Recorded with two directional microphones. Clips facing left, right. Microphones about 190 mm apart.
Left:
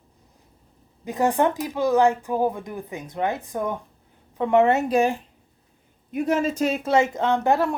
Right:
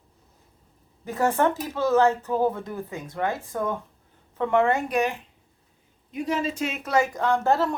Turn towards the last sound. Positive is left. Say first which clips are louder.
# left 1 dB
turn(degrees=15)  # may be behind; listen again after turning